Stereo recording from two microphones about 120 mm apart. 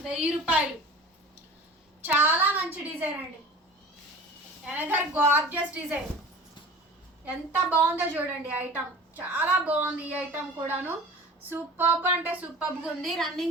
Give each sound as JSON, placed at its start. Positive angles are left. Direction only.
{"t": 0.0, "sound": "a woman's voice", "side_deg": -5}
{"t": 2.0, "sound": "a woman's voice", "side_deg": -15}
{"t": 4.7, "sound": "a woman's voice", "side_deg": -15}
{"t": 7.3, "sound": "a woman's voice", "side_deg": -15}